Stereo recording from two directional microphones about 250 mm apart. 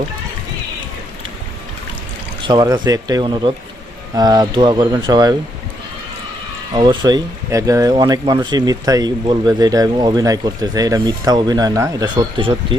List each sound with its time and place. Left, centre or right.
2.4 s speech: centre
6.7 s speech: centre